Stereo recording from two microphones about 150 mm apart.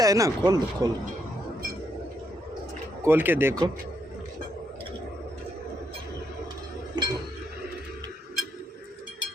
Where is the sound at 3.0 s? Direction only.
15° right (ahead or behind).